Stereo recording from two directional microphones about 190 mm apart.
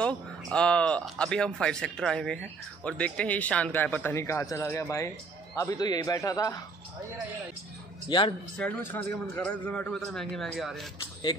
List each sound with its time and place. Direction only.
0.0 s speech: 5° left (ahead or behind)
8.1 s a man's voice: 25° left (ahead or behind)
8.5 s a man's voice: 10° left (ahead or behind)